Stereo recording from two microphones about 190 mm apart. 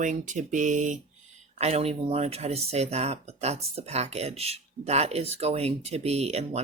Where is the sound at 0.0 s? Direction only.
40° right (ahead or behind).